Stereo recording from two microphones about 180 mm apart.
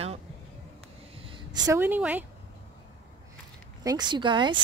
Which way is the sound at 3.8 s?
20° right (ahead or behind).